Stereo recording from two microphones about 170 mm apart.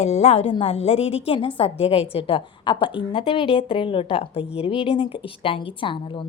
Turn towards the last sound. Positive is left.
turn(degrees=30)  # may be behind; listen again after turning